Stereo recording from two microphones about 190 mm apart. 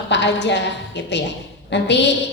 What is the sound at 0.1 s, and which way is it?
A woman's voice, 65° left (ahead or behind).